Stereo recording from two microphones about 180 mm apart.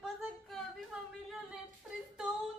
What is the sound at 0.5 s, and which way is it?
Speech, centre (ahead or behind).